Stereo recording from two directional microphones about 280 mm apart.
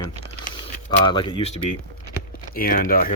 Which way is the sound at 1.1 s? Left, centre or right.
Centre.